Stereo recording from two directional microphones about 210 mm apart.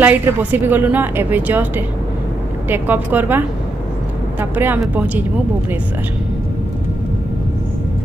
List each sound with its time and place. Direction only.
0.0 s a woman's voice: 10° right (ahead or behind)
2.7 s a woman's voice: 10° right (ahead or behind)